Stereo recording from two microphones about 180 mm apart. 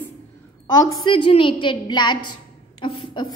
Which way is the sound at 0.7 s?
20° left (ahead or behind).